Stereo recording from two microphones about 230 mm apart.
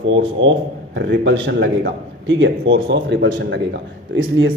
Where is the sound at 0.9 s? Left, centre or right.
Right.